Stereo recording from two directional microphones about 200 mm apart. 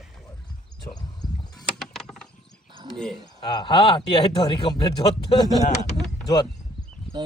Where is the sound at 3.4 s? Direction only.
20° left (ahead or behind).